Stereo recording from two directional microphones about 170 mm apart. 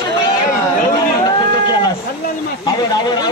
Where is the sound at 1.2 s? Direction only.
25° left (ahead or behind).